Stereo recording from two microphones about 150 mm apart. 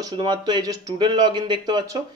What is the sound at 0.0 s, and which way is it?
Speech, 30° right (ahead or behind).